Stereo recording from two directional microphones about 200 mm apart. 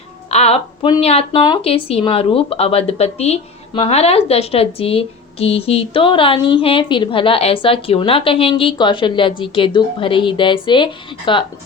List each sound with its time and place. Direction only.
0.3 s a woman's voice: 30° left (ahead or behind)